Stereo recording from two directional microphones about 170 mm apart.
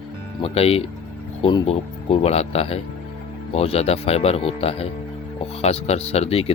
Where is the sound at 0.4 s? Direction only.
35° left (ahead or behind).